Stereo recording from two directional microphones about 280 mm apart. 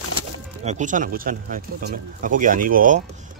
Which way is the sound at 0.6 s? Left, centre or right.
Right.